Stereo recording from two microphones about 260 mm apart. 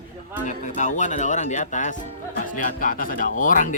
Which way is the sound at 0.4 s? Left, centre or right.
Left.